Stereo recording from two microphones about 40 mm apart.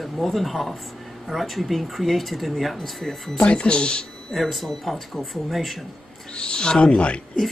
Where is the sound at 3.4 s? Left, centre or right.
Left.